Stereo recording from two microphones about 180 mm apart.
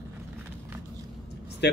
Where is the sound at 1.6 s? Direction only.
65° left (ahead or behind).